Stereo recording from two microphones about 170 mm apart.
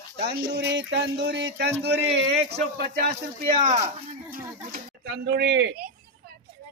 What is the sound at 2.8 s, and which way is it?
Speech, 70° right (ahead or behind).